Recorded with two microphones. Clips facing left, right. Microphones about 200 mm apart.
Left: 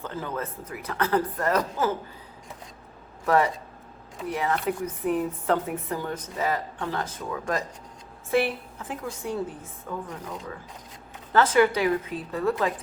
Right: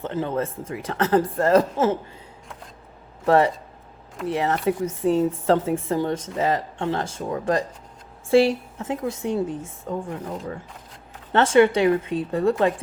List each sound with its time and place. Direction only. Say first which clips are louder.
0.0 s a woman's voice: right 7 dB; 25° right (ahead or behind)
3.2 s a woman's voice: right 4 dB; 30° right (ahead or behind)